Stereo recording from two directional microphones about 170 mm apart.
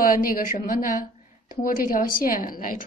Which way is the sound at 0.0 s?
55° left (ahead or behind).